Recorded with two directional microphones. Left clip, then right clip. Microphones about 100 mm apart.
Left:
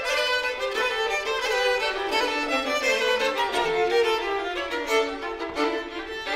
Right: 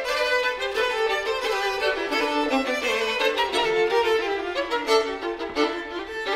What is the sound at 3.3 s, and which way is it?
Music, 35° right (ahead or behind).